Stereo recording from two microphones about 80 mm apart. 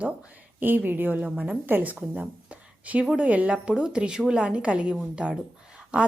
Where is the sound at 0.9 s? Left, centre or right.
Right.